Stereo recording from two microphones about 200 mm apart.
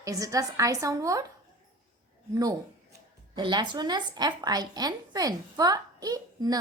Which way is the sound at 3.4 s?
25° right (ahead or behind).